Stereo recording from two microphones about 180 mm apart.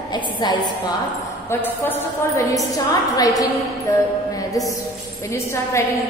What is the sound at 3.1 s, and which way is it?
Speech, 20° left (ahead or behind).